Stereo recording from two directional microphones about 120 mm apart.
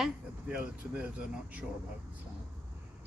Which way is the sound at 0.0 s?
10° right (ahead or behind).